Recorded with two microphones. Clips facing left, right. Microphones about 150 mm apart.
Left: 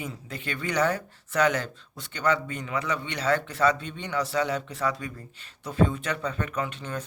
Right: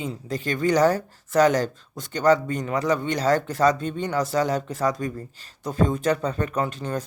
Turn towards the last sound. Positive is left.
turn(degrees=-40)  # may be behind; listen again after turning